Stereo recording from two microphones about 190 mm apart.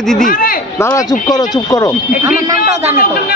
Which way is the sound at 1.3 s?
20° left (ahead or behind).